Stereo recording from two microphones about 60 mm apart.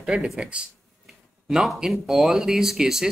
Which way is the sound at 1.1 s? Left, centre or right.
Centre.